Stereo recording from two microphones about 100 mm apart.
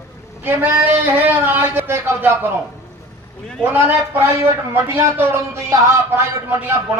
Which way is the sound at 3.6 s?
20° right (ahead or behind).